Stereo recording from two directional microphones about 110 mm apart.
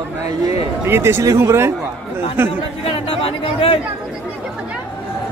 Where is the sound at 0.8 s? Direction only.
20° right (ahead or behind).